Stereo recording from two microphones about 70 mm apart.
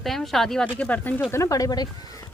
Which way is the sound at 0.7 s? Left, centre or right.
Left.